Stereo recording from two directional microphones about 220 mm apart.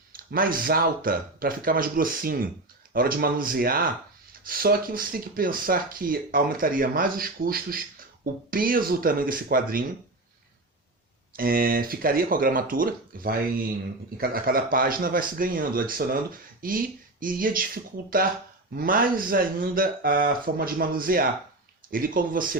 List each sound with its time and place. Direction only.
0.1 s speech: 40° right (ahead or behind)
11.3 s speech: 40° right (ahead or behind)